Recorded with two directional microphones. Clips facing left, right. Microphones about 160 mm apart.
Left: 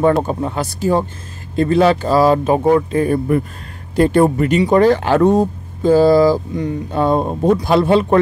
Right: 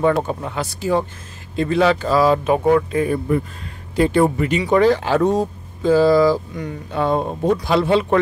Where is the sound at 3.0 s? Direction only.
45° left (ahead or behind).